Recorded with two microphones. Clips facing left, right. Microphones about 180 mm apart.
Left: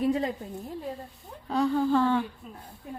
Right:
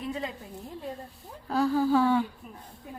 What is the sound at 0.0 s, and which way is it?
Speech, 40° left (ahead or behind).